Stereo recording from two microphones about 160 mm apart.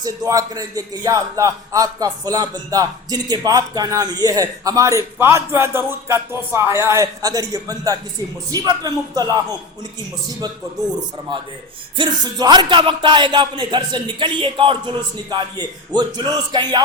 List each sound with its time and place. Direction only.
0.0 s a man's voice: 20° right (ahead or behind)
11.3 s a man's voice: 30° right (ahead or behind)